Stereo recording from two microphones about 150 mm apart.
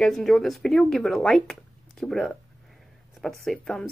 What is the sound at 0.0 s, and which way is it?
Speech, centre (ahead or behind).